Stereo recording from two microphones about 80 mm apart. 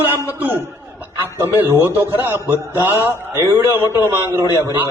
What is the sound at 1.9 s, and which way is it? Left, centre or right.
A man's voice, right.